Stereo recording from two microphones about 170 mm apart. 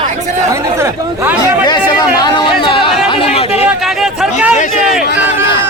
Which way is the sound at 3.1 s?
35° left (ahead or behind).